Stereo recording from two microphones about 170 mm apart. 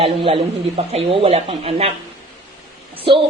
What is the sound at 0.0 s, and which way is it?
Speech, 30° right (ahead or behind).